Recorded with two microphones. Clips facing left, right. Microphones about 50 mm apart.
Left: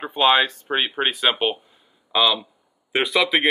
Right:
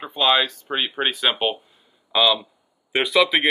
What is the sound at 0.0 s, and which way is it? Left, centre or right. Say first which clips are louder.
Speech: left 2 dB; left.